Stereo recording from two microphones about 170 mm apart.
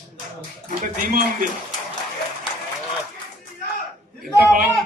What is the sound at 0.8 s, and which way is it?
Speech, 55° right (ahead or behind).